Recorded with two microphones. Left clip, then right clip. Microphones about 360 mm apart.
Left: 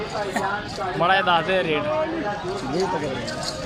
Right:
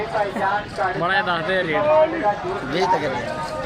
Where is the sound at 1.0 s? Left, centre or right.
Centre.